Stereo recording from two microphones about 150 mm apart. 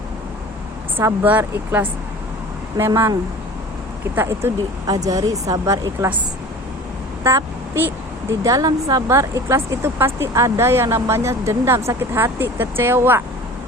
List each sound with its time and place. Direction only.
0.9 s speech: 15° right (ahead or behind)
7.9 s speech: 20° right (ahead or behind)